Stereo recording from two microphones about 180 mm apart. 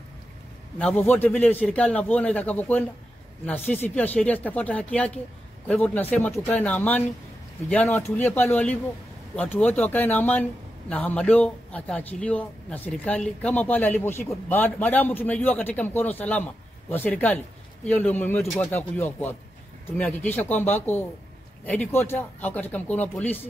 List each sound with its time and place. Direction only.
0.7 s a man's voice: 10° left (ahead or behind)
18.7 s a man's voice: 10° left (ahead or behind)